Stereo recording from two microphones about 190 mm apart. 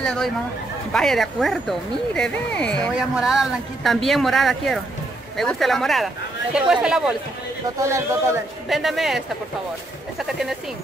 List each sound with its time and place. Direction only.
0.0 s speech: 5° left (ahead or behind)
7.8 s speech: 15° right (ahead or behind)
8.6 s speech: centre (ahead or behind)